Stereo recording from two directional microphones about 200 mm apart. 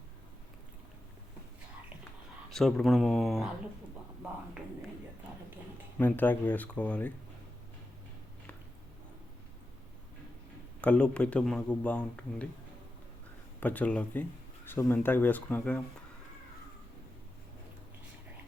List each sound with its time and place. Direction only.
2.5 s speech: centre (ahead or behind)
6.0 s speech: 10° left (ahead or behind)
10.8 s speech: 5° left (ahead or behind)
13.6 s speech: 10° left (ahead or behind)